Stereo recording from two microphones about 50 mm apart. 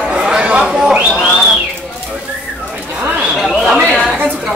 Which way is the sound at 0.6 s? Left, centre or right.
Centre.